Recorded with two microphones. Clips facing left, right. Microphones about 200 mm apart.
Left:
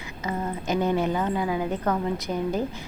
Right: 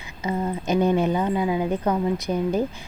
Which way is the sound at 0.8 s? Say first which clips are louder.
Right 4 dB; 15° right (ahead or behind).